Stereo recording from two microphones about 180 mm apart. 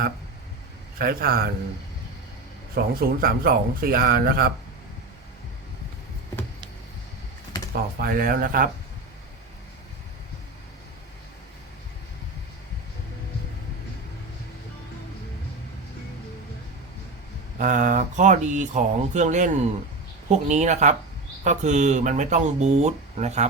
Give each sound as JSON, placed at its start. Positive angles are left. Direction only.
{"t": 0.9, "sound": "speech", "side_deg": -55}
{"t": 2.7, "sound": "speech", "side_deg": -60}
{"t": 7.7, "sound": "speech", "side_deg": -55}
{"t": 17.6, "sound": "speech", "side_deg": -45}